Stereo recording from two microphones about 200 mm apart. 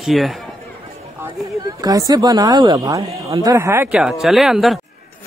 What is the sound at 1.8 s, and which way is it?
A woman's voice, 20° right (ahead or behind).